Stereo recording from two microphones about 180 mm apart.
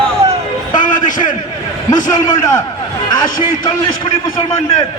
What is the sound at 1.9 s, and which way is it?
Speech, 45° left (ahead or behind).